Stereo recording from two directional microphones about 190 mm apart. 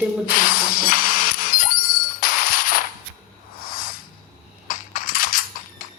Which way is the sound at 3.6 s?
50° left (ahead or behind).